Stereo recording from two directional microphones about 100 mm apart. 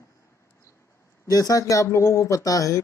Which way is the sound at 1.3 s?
40° left (ahead or behind).